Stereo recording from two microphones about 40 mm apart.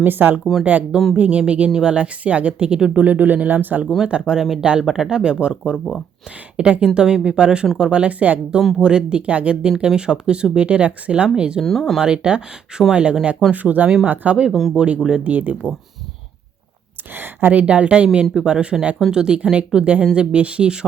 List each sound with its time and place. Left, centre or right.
0.0 s a woman's voice: right
0.6 s speech: right
2.9 s a man's voice: right
4.0 s speech: right
8.2 s speech: right
8.8 s speech: right
11.6 s speech: centre
11.9 s speech: right
13.5 s speech: right
14.5 s speech: centre
14.9 s speech: centre
15.2 s a man's voice: right
17.1 s a woman's voice: right
17.5 s speech: right